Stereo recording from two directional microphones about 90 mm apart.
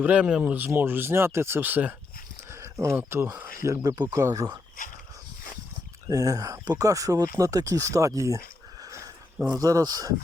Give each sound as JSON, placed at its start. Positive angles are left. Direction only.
{"t": 0.0, "sound": "speech", "side_deg": -15}
{"t": 0.7, "sound": "speech", "side_deg": -25}
{"t": 2.5, "sound": "a sound", "side_deg": -35}
{"t": 3.1, "sound": "speech", "side_deg": -25}
{"t": 3.7, "sound": "speech", "side_deg": -45}
{"t": 6.1, "sound": "speech", "side_deg": -35}
{"t": 8.8, "sound": "sniff", "side_deg": -35}
{"t": 9.6, "sound": "speech", "side_deg": -40}